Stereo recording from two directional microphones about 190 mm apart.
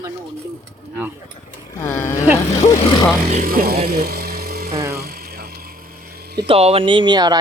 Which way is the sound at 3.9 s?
55° right (ahead or behind).